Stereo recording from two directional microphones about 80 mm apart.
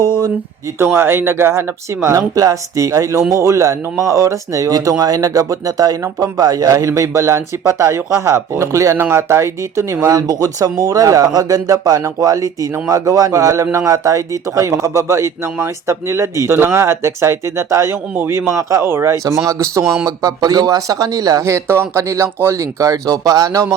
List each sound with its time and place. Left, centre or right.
0.8 s speech: right